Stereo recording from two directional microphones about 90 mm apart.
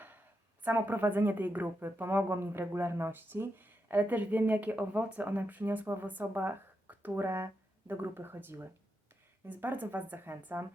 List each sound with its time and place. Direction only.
0.6 s speech: 20° right (ahead or behind)